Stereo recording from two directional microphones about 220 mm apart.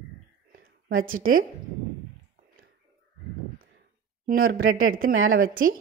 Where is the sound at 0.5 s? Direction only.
40° right (ahead or behind).